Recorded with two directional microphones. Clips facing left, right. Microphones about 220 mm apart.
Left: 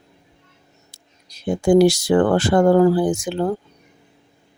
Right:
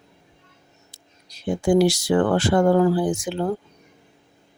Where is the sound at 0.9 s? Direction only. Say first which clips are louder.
Even; 45° left (ahead or behind).